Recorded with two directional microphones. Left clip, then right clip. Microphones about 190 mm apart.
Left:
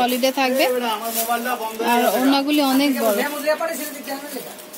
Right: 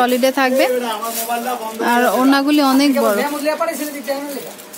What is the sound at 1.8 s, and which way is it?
A woman's voice, 15° right (ahead or behind).